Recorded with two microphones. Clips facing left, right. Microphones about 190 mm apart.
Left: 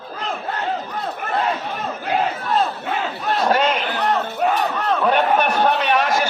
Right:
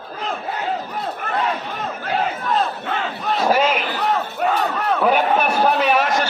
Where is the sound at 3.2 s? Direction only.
5° right (ahead or behind).